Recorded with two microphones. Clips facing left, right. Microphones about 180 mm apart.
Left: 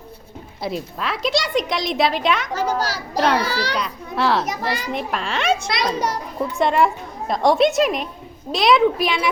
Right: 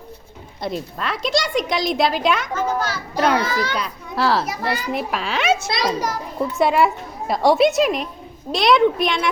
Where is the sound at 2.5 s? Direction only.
35° left (ahead or behind).